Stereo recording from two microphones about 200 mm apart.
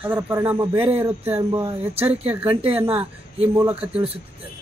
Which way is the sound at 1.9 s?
30° right (ahead or behind).